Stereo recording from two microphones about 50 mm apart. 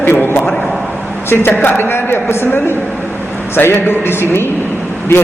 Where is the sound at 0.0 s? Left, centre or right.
Left.